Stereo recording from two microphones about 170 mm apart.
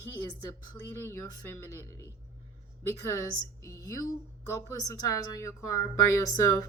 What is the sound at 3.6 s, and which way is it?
A woman's voice, 15° left (ahead or behind).